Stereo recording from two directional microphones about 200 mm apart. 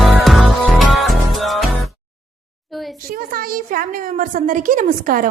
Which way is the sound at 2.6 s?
Centre (ahead or behind).